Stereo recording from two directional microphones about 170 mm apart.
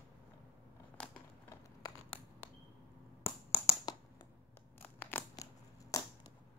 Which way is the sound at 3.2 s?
15° left (ahead or behind).